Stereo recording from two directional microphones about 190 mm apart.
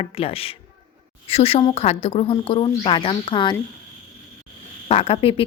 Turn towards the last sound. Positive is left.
turn(degrees=30)  # may be behind; listen again after turning